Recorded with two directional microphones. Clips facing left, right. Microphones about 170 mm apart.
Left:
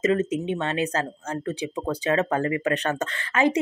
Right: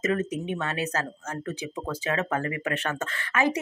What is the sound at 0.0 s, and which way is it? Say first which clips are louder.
Speech: left 4 dB; 25° left (ahead or behind).